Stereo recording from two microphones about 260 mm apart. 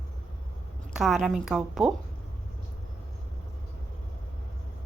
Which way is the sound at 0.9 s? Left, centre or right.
Centre.